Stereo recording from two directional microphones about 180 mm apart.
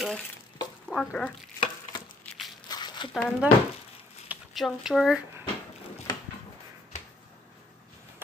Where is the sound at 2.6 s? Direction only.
25° left (ahead or behind).